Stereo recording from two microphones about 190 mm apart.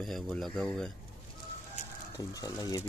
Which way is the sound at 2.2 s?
20° left (ahead or behind).